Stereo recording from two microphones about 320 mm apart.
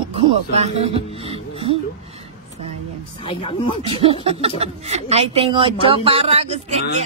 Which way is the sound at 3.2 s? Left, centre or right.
Centre.